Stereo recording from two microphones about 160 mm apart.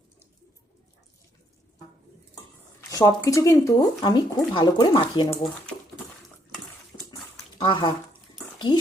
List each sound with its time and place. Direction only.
2.9 s speech: 20° left (ahead or behind)
7.6 s speech: 30° left (ahead or behind)
8.5 s a sound: 30° left (ahead or behind)